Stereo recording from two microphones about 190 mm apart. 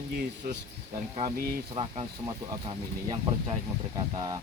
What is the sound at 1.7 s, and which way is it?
Speech, 30° right (ahead or behind).